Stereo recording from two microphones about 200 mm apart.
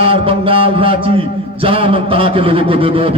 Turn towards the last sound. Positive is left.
turn(degrees=-30)  # may be behind; listen again after turning